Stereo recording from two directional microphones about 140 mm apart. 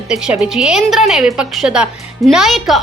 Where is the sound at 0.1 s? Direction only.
5° right (ahead or behind).